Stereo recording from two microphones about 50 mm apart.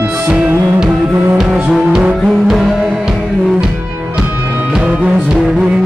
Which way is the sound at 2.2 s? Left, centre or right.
Centre.